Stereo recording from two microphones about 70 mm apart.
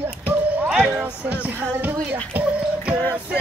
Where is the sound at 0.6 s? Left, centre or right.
Centre.